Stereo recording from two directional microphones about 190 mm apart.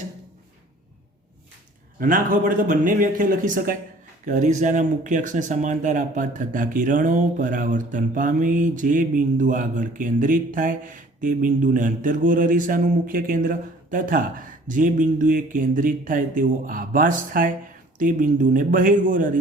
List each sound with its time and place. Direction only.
2.0 s speech: 45° right (ahead or behind)